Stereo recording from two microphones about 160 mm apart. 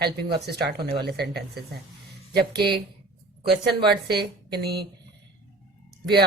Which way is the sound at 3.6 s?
90° right.